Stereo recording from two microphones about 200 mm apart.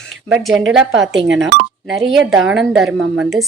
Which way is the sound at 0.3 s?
5° right (ahead or behind).